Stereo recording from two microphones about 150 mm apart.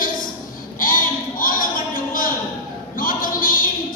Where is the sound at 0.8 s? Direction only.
70° left (ahead or behind).